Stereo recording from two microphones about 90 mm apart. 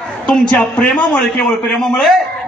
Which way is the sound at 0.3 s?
10° left (ahead or behind).